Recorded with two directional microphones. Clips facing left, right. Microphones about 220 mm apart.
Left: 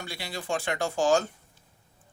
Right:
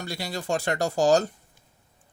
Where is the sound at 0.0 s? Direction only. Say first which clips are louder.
Right 5 dB; 40° right (ahead or behind).